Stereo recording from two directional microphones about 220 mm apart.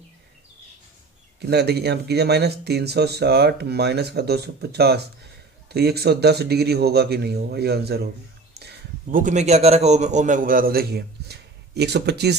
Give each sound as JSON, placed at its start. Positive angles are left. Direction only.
{"t": 1.4, "sound": "a man's voice", "side_deg": -50}